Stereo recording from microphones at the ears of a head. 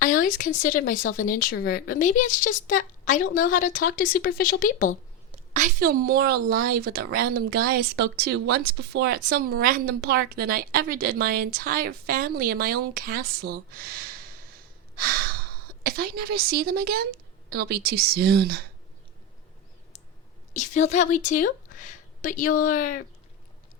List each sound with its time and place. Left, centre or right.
0.0 s speech: left
5.3 s a woman's voice: right
20.5 s a woman's voice: left